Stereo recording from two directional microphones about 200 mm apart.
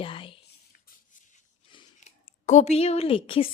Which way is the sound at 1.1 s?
40° left (ahead or behind).